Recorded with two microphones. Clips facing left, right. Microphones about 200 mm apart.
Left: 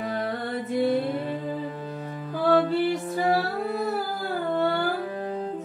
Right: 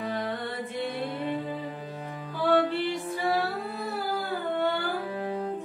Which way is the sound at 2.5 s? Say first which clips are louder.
Left 3 dB; 40° left (ahead or behind).